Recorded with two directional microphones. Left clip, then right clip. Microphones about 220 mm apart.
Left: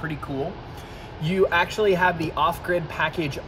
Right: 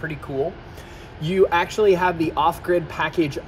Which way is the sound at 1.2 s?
30° right (ahead or behind).